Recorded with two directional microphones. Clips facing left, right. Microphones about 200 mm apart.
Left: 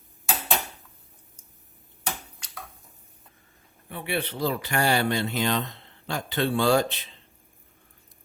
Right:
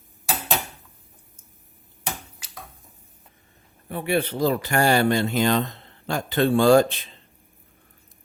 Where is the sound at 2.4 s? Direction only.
5° right (ahead or behind).